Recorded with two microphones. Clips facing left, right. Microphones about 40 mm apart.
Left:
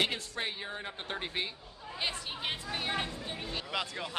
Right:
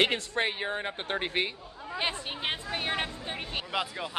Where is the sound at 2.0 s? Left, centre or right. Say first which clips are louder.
Right 3 dB; right.